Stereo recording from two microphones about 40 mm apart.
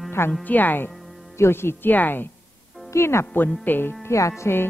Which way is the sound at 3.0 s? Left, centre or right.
Left.